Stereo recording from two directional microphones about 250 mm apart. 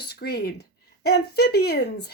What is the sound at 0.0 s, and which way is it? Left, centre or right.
Speech, left.